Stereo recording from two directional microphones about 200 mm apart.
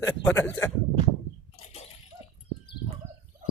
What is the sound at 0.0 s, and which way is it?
Speech, 10° left (ahead or behind).